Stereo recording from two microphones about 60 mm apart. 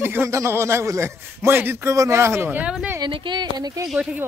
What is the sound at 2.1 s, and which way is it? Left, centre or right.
Speech, right.